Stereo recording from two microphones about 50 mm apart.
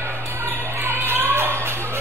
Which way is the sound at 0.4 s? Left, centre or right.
Right.